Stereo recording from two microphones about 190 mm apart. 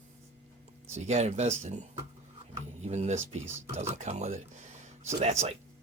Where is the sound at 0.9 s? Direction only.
35° right (ahead or behind).